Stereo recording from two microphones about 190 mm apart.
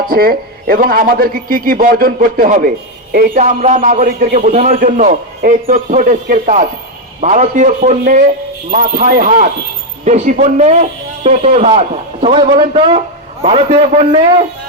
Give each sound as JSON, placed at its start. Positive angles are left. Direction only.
{"t": 0.1, "sound": "a man's voice", "side_deg": -50}